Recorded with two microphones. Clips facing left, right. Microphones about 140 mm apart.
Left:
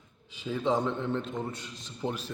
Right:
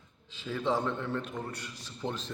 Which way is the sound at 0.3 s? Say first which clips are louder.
Left 2 dB; 15° left (ahead or behind).